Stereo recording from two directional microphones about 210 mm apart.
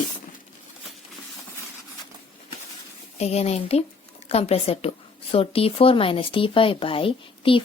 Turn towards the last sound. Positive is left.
turn(degrees=25)  # may be behind; listen again after turning